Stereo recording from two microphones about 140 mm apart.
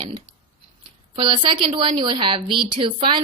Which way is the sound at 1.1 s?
35° right (ahead or behind).